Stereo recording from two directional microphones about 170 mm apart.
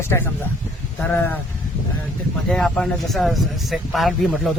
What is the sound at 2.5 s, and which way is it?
Speech, 5° left (ahead or behind).